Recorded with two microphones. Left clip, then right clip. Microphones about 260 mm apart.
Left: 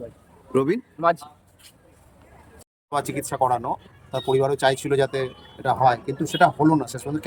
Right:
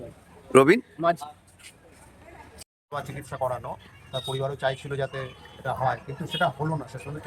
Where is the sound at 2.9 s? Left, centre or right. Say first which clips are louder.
Left 9 dB; left.